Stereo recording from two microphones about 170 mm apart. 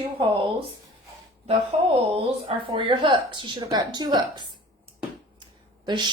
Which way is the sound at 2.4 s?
30° right (ahead or behind).